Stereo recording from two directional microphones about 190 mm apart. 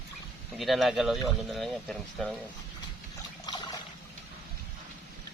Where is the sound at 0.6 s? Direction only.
Centre (ahead or behind).